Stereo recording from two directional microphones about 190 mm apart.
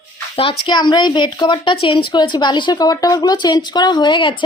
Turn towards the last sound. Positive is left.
turn(degrees=25)  # may be behind; listen again after turning